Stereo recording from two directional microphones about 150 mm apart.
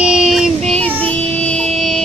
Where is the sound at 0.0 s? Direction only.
5° right (ahead or behind).